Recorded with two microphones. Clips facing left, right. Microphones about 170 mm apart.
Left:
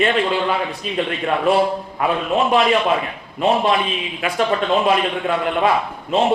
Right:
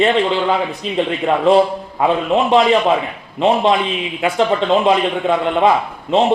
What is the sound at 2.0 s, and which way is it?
A man's voice, 25° right (ahead or behind).